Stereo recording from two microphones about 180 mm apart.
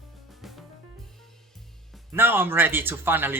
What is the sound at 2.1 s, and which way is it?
Speech, 10° right (ahead or behind).